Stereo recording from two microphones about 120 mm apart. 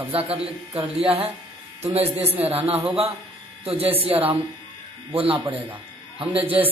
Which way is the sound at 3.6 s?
55° right (ahead or behind).